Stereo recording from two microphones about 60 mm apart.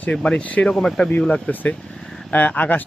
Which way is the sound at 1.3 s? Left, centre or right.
Left.